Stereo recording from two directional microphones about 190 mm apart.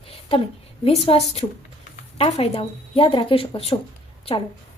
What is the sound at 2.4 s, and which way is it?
Speech, 30° left (ahead or behind).